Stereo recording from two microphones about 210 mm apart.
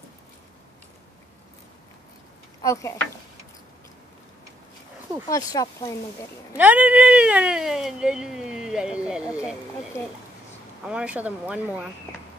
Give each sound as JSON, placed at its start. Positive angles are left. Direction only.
{"t": 2.6, "sound": "speech", "side_deg": 15}
{"t": 5.3, "sound": "speech", "side_deg": 15}
{"t": 6.5, "sound": "speech", "side_deg": -5}
{"t": 10.9, "sound": "speech", "side_deg": -5}